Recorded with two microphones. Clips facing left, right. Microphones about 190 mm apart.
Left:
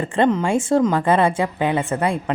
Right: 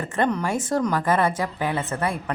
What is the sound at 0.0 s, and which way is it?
A woman's voice, 25° left (ahead or behind).